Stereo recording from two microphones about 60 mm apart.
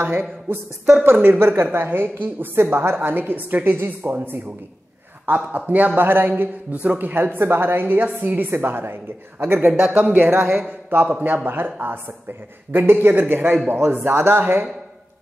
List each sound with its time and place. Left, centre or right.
0.0 s a woman's voice: right
9.8 s a woman's voice: right